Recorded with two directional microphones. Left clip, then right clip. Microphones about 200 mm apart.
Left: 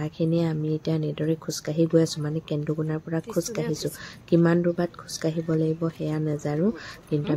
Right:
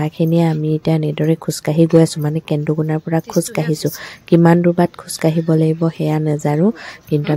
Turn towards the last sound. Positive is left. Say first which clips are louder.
# right 8 dB
turn(degrees=-35)  # may be behind; listen again after turning